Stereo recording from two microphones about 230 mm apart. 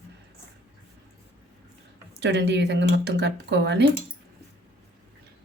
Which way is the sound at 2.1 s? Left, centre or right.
Right.